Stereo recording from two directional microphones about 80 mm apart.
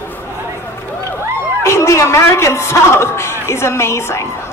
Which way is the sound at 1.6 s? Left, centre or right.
Left.